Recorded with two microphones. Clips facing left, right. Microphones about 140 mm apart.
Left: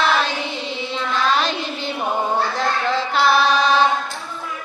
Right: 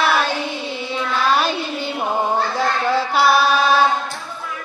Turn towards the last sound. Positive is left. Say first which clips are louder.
# right 1 dB
turn(degrees=-5)  # may be behind; listen again after turning